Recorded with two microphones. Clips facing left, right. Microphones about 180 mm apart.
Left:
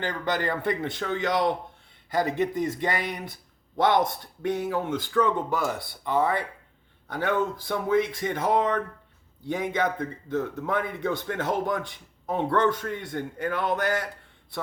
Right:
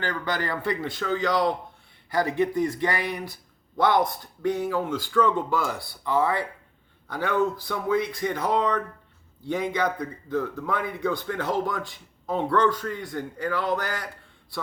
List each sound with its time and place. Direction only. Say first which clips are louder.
0.0 s speech: left 1 dB; 20° left (ahead or behind)